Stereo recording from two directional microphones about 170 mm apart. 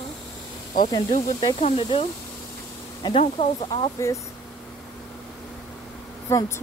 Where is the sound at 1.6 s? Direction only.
30° left (ahead or behind).